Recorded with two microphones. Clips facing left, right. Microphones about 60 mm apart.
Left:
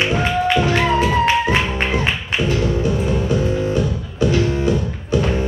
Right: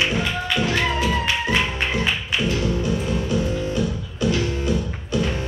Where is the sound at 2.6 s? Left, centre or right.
Left.